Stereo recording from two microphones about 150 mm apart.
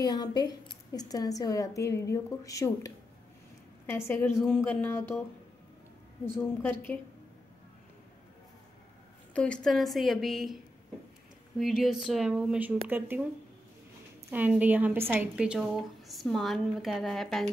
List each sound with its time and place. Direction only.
0.0 s a woman's voice: 25° left (ahead or behind)
4.4 s a woman's voice: centre (ahead or behind)
4.6 s a woman's voice: 10° left (ahead or behind)
6.2 s a woman's voice: 15° left (ahead or behind)
9.3 s a woman's voice: 5° left (ahead or behind); by 13.2 s 15° right (ahead or behind)
14.3 s a woman's voice: 10° right (ahead or behind)